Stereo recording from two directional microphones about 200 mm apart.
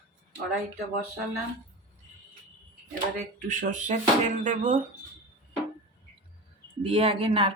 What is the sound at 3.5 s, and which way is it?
Speech, 40° right (ahead or behind).